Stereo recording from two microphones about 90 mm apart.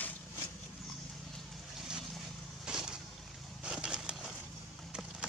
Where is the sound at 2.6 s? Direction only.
10° right (ahead or behind).